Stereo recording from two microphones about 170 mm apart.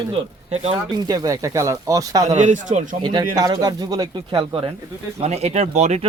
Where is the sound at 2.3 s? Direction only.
45° right (ahead or behind).